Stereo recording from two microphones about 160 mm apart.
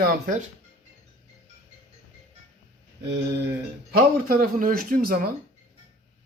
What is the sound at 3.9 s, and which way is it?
Speech, 65° right (ahead or behind).